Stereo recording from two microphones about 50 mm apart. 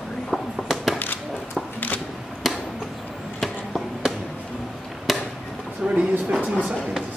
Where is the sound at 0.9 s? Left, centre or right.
Left.